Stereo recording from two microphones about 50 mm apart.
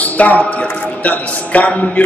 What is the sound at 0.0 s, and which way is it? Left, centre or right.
A man's voice, left.